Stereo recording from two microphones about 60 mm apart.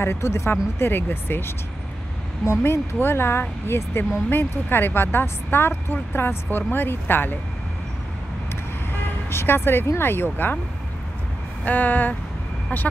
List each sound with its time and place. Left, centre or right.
0.0 s speech: left
0.5 s speech: left
9.0 s speech: left
11.6 s speech: left